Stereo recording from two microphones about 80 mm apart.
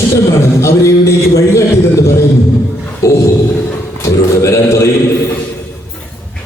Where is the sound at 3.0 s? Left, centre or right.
Left.